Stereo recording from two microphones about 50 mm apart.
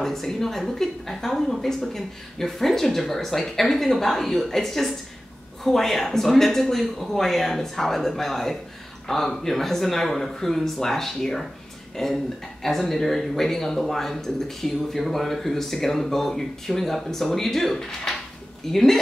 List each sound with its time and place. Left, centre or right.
0.0 s a woman's voice: centre